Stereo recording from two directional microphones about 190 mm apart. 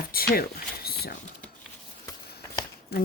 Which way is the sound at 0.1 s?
50° left (ahead or behind).